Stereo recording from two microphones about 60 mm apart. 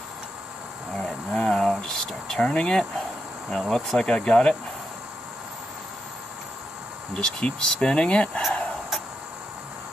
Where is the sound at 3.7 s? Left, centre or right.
Centre.